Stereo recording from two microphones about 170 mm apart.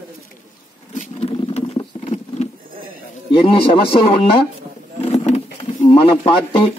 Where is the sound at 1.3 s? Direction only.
35° left (ahead or behind).